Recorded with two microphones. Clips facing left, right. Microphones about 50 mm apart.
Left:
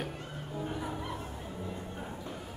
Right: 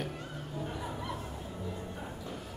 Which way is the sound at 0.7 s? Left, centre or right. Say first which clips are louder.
Left 2 dB; centre.